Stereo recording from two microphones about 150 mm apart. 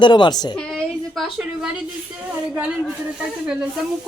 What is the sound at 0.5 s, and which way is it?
A woman's voice, centre (ahead or behind).